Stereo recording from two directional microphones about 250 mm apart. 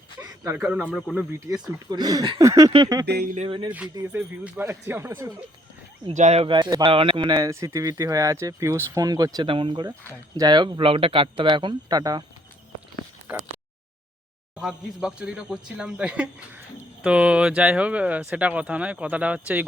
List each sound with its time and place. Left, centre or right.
0.2 s speech: centre
1.3 s speech: centre
3.1 s speech: right
3.7 s speech: centre
6.1 s speech: right
13.3 s speech: centre
14.5 s speech: centre